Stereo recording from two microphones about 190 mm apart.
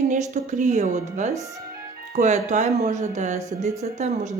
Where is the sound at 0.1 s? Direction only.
40° right (ahead or behind).